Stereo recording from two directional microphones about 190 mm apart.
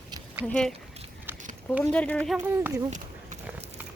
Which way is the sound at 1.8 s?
5° left (ahead or behind).